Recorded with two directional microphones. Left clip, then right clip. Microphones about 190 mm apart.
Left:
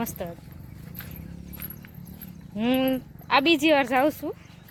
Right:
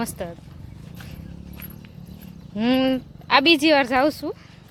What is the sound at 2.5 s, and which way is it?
Speech, 10° right (ahead or behind).